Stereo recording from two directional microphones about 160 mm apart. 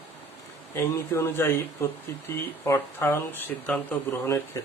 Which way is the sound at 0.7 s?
20° left (ahead or behind).